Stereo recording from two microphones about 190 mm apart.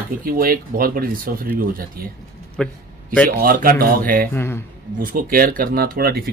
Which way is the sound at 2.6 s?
5° left (ahead or behind).